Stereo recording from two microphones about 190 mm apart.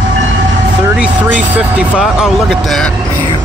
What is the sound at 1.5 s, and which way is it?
Speech, 5° right (ahead or behind).